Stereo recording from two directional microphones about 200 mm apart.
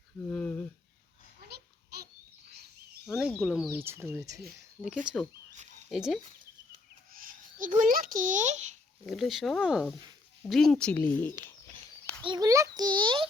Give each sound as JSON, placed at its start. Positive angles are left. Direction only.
{"t": 0.3, "sound": "a sound", "side_deg": 5}
{"t": 1.5, "sound": "babbling", "side_deg": -50}
{"t": 3.1, "sound": "speech", "side_deg": 0}
{"t": 3.7, "sound": "speech", "side_deg": -10}
{"t": 5.0, "sound": "speech", "side_deg": 0}
{"t": 7.1, "sound": "a child's voice", "side_deg": -45}
{"t": 9.0, "sound": "speech", "side_deg": 0}
{"t": 12.2, "sound": "a child's voice", "side_deg": -20}